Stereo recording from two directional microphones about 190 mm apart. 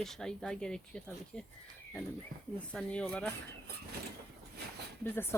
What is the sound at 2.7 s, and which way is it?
Speech, 5° left (ahead or behind).